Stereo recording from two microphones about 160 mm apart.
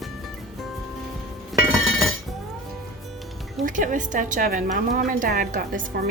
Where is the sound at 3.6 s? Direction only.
55° right (ahead or behind).